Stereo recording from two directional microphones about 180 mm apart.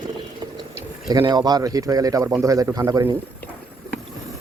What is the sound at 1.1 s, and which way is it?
Speech, 20° right (ahead or behind).